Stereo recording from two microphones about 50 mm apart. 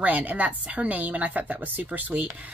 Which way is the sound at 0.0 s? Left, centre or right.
Right.